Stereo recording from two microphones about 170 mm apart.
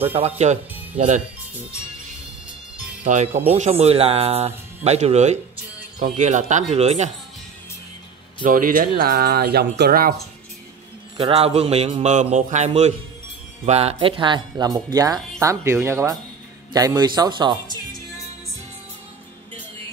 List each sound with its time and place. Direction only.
0.0 s speech: 35° right (ahead or behind)
3.0 s speech: 45° right (ahead or behind)
8.5 s speech: 55° right (ahead or behind)
11.1 s speech: 35° right (ahead or behind)